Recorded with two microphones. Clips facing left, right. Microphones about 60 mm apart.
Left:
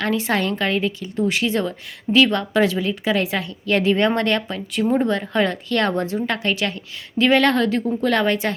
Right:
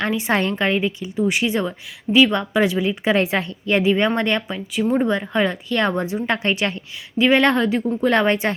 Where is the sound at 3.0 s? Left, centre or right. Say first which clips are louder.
Right 3 dB; right.